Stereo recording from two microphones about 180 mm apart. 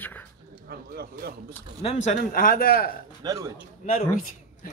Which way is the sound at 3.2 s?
20° right (ahead or behind).